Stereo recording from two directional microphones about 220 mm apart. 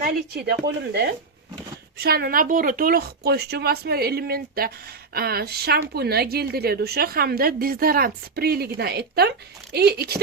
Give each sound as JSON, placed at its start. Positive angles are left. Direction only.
{"t": 0.0, "sound": "speech", "side_deg": -45}